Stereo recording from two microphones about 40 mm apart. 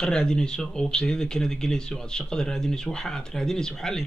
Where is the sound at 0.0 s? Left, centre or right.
Centre.